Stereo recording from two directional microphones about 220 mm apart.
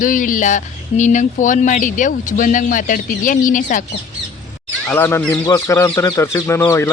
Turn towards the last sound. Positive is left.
turn(degrees=10)  # may be behind; listen again after turning